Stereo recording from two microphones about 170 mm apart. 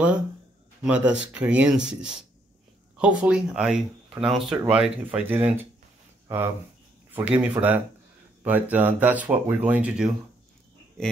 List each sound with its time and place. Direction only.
0.8 s speech: 5° right (ahead or behind)